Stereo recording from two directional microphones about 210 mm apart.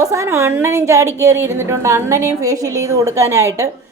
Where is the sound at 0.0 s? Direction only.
15° right (ahead or behind).